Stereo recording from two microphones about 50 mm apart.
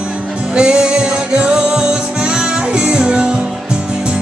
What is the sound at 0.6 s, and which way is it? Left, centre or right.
Music, centre.